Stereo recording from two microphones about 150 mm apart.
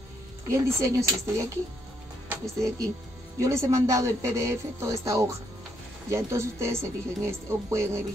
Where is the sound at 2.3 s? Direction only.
20° right (ahead or behind).